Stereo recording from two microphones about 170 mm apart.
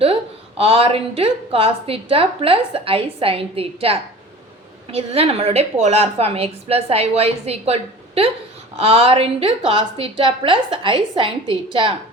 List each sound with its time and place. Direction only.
0.0 s a woman's voice: 35° right (ahead or behind)